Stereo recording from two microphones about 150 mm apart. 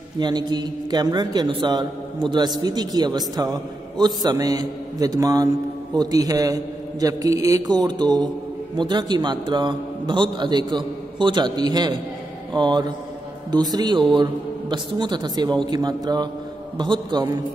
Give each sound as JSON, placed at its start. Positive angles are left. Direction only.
{"t": 0.2, "sound": "a man's voice", "side_deg": -30}